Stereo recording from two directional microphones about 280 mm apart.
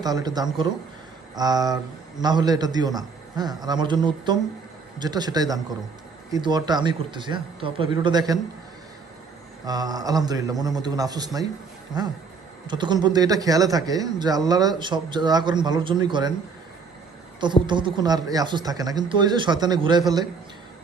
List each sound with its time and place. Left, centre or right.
0.0 s a man's voice: centre
9.6 s a man's voice: centre
17.4 s a man's voice: centre